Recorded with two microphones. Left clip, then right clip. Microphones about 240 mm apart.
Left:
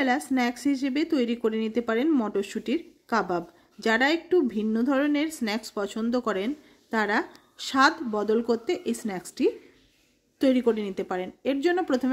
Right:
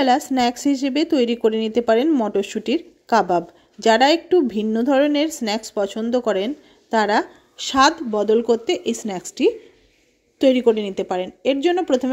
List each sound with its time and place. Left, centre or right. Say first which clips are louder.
0.0 s speech: right 8 dB; centre